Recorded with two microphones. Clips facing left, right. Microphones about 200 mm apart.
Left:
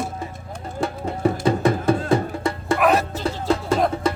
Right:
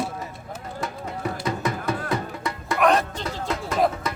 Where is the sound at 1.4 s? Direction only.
30° left (ahead or behind).